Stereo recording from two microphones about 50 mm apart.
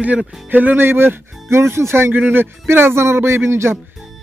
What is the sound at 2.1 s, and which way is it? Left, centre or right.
Speech, right.